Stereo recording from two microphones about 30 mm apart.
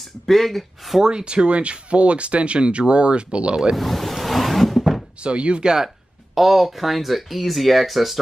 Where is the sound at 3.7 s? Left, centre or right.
Centre.